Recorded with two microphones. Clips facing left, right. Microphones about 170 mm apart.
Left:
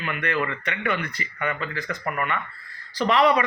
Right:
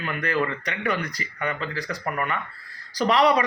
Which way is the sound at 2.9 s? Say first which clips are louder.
Even; 40° right (ahead or behind).